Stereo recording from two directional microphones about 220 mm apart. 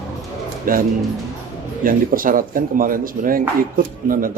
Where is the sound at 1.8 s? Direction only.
40° right (ahead or behind).